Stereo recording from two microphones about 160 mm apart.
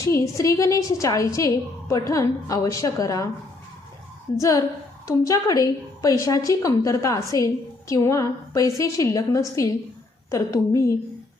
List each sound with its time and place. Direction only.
0.0 s a woman's voice: 20° left (ahead or behind)
4.4 s a woman's voice: 20° left (ahead or behind)